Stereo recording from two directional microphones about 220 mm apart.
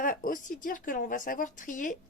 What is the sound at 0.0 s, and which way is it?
Speech, 40° left (ahead or behind).